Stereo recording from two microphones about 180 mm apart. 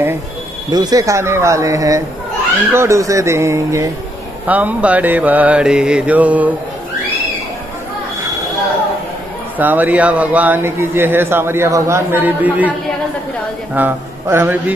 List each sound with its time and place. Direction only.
0.7 s speech: 20° right (ahead or behind)
9.6 s speech: 10° right (ahead or behind)
13.7 s speech: 10° right (ahead or behind)